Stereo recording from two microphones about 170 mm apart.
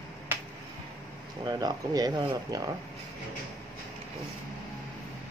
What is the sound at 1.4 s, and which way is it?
Speech, 20° right (ahead or behind).